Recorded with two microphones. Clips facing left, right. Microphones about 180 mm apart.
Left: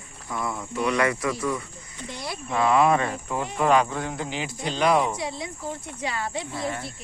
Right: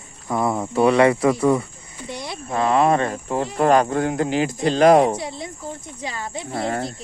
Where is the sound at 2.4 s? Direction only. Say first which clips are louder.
Right 2 dB; 40° right (ahead or behind).